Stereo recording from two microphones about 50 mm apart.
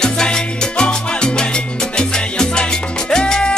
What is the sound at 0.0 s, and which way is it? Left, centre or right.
Salsa music, centre.